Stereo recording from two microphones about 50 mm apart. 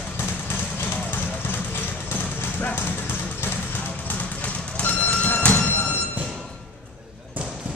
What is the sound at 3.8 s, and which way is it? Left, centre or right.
Music, left.